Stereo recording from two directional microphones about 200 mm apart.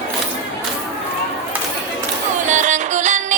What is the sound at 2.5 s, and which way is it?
Music, 35° right (ahead or behind).